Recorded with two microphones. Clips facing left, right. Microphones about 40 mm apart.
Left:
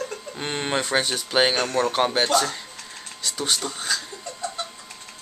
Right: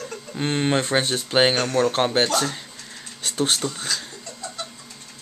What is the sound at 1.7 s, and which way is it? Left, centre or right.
Speech, centre.